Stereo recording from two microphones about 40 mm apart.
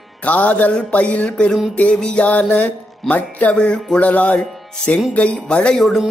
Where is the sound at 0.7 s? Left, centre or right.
Left.